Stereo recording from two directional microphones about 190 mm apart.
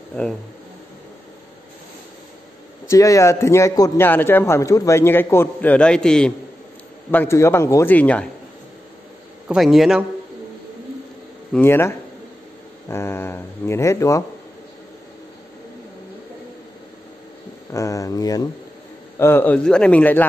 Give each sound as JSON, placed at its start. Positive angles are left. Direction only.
{"t": 0.1, "sound": "speech", "side_deg": 5}
{"t": 2.9, "sound": "a man's voice", "side_deg": 15}
{"t": 9.5, "sound": "a man's voice", "side_deg": 0}
{"t": 11.5, "sound": "a man's voice", "side_deg": 10}
{"t": 17.6, "sound": "a man's voice", "side_deg": 15}